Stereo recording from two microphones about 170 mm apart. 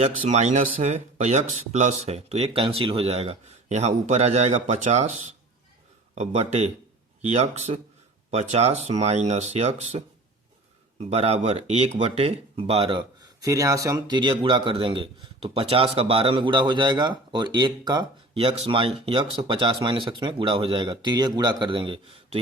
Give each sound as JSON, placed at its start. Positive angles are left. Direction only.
{"t": 0.0, "sound": "speech", "side_deg": -40}
{"t": 11.1, "sound": "speech", "side_deg": -35}